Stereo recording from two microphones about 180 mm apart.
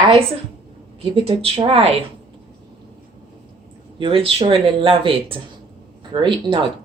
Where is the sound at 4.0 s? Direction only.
30° right (ahead or behind).